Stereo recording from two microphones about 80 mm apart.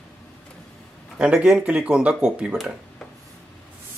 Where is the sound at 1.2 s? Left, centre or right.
Centre.